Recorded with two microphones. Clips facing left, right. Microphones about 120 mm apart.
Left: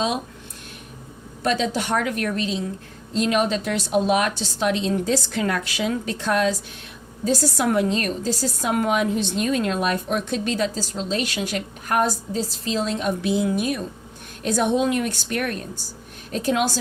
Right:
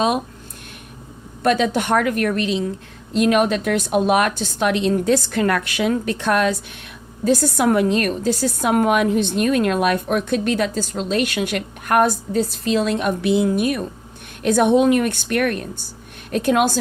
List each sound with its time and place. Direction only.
1.4 s a woman's voice: 55° right (ahead or behind)